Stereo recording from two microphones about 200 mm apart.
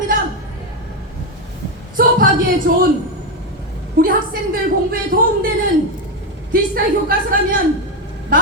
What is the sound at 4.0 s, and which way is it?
A woman's voice, 45° right (ahead or behind).